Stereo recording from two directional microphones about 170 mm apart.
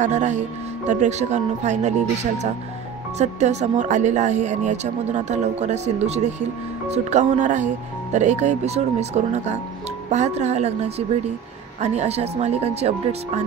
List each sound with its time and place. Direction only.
0.0 s speech: 45° right (ahead or behind)
3.2 s speech: 40° right (ahead or behind)